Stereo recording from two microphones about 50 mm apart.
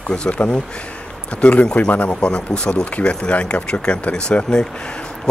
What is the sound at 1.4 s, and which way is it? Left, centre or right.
Speech, left.